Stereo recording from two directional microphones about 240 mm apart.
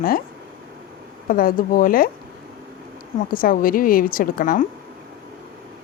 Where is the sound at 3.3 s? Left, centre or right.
Left.